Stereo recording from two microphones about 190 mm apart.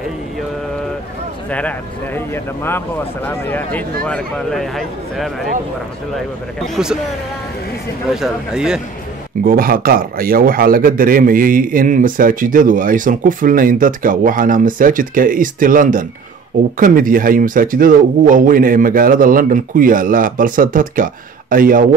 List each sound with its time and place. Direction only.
1.5 s a man's voice: 5° left (ahead or behind)
8.1 s a man's voice: 5° right (ahead or behind)
9.4 s a man's voice: 50° right (ahead or behind)